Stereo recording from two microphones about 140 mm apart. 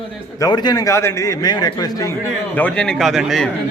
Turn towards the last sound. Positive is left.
turn(degrees=0)  # may be behind; listen again after turning